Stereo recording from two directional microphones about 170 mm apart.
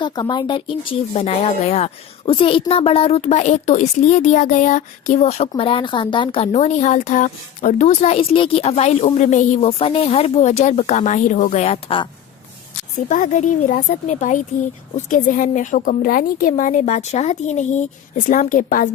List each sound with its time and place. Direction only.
0.0 s speech: 25° left (ahead or behind)
13.1 s a woman's voice: 50° left (ahead or behind)